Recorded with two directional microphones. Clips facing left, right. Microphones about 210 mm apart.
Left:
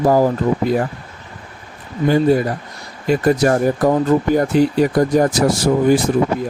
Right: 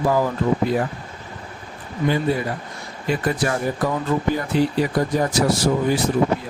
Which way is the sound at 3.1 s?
45° left (ahead or behind).